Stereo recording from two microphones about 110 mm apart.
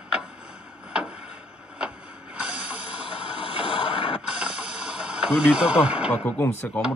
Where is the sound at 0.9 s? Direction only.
10° right (ahead or behind).